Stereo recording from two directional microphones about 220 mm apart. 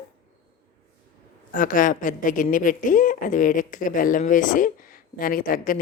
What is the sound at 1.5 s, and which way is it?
Speech, 35° left (ahead or behind).